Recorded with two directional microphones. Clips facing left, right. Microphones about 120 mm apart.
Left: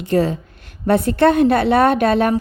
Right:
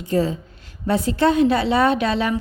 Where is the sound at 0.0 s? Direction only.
70° left (ahead or behind).